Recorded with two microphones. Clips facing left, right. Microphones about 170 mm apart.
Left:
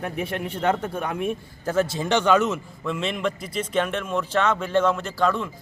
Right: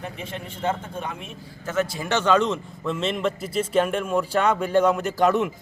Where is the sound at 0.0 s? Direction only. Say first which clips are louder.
Left 6 dB; 60° left (ahead or behind).